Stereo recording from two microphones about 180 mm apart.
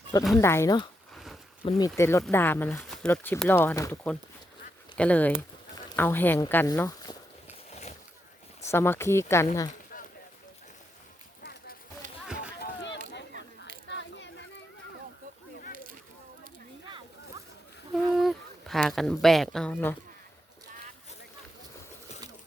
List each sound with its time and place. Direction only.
0.3 s speech: 15° left (ahead or behind)
1.1 s a sound: centre (ahead or behind)
1.6 s speech: 30° left (ahead or behind)
2.0 s speech: 15° left (ahead or behind)
7.7 s boat: 40° left (ahead or behind)
8.6 s speech: 15° left (ahead or behind)
12.5 s rowboat: 80° left
13.8 s a sound: 85° left
17.9 s a sound: centre (ahead or behind)